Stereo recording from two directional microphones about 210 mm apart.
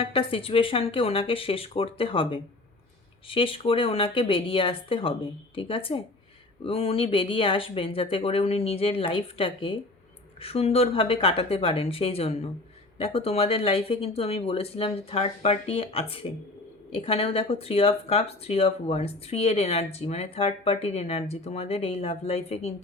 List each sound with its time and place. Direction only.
0.0 s speech: 25° left (ahead or behind)